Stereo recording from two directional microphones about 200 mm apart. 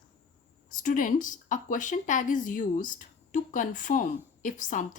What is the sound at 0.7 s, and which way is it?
Speech, 40° left (ahead or behind).